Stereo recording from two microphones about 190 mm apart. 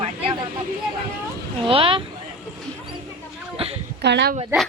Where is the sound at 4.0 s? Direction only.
60° right (ahead or behind).